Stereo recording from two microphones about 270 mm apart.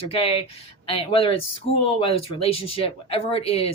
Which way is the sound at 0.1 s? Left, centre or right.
Left.